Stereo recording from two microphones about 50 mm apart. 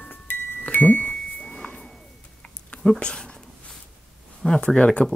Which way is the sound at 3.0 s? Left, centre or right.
Centre.